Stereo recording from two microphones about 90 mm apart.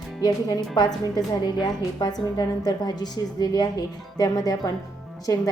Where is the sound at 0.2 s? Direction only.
45° left (ahead or behind).